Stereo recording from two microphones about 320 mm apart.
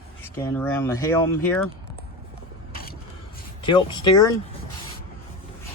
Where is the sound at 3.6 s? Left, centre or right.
Centre.